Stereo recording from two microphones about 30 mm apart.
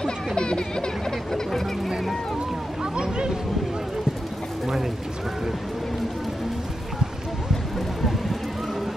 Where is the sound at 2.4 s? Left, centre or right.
Right.